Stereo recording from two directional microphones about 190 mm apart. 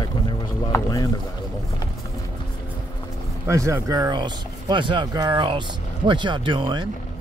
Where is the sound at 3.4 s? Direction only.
15° right (ahead or behind).